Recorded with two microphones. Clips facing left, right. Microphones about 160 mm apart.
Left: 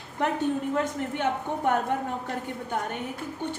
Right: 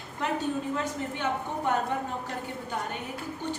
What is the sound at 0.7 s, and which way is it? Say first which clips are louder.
A woman's voice: left 4 dB; 55° left (ahead or behind).